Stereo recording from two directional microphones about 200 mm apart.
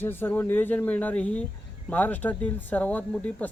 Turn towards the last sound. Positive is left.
turn(degrees=10)  # may be behind; listen again after turning